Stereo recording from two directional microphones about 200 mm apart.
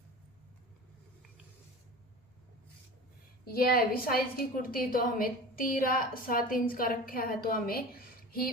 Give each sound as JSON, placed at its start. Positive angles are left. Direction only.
{"t": 3.4, "sound": "a woman's voice", "side_deg": 45}